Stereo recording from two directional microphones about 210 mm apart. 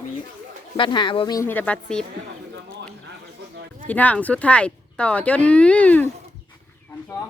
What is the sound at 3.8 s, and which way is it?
Speech, 5° left (ahead or behind).